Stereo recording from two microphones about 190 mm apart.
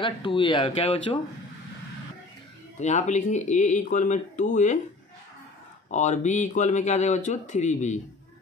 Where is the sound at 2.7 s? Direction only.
40° left (ahead or behind).